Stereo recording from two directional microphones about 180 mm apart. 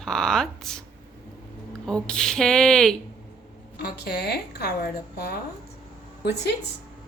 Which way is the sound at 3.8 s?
65° left (ahead or behind).